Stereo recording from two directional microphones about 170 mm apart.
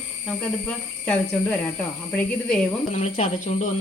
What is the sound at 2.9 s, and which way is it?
Speech, 40° left (ahead or behind).